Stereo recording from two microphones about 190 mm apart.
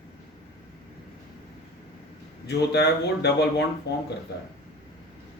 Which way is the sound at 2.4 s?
60° left (ahead or behind).